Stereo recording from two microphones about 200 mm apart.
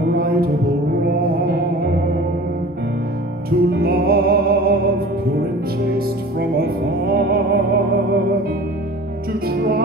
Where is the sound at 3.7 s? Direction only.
50° right (ahead or behind).